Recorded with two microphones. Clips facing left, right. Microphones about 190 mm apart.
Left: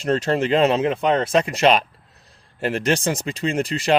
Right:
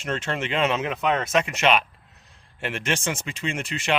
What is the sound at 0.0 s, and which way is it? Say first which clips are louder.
Speech: left 8 dB; 35° left (ahead or behind).